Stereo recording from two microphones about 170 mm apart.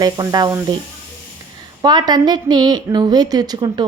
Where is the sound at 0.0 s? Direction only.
25° right (ahead or behind).